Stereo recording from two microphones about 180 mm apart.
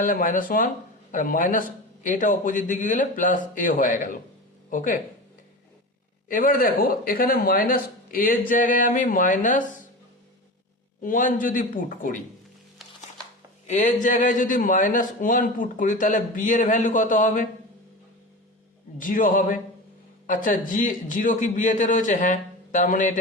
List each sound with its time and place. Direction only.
0.0 s speech: 50° left (ahead or behind)
6.2 s speech: 50° left (ahead or behind)
11.0 s speech: 50° left (ahead or behind)
12.8 s music: centre (ahead or behind)
13.7 s speech: 40° left (ahead or behind)
18.9 s speech: 50° left (ahead or behind)